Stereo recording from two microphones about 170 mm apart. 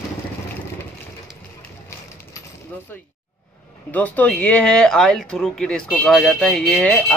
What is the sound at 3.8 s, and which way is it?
Speech, 10° left (ahead or behind).